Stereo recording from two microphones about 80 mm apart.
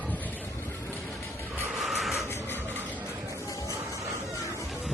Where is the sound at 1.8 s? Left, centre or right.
Centre.